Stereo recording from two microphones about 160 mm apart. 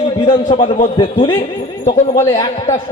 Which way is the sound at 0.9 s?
30° left (ahead or behind).